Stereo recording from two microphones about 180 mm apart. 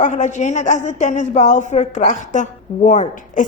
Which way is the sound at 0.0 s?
40° left (ahead or behind).